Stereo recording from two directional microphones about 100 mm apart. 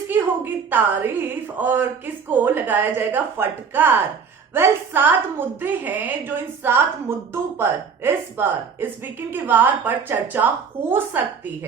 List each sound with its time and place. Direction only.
0.1 s a woman's voice: 20° right (ahead or behind)